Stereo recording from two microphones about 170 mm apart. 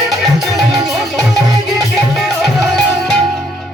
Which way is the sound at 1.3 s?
20° right (ahead or behind).